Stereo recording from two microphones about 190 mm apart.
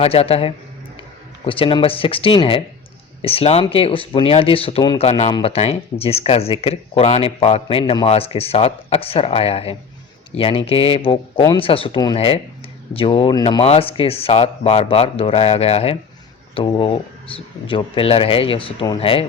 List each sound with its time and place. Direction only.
0.0 s speech: 30° left (ahead or behind)